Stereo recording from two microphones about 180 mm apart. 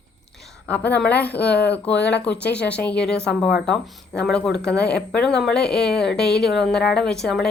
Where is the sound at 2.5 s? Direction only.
5° left (ahead or behind).